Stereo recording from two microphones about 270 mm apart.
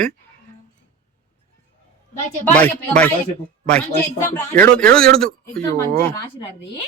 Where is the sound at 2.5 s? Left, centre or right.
Centre.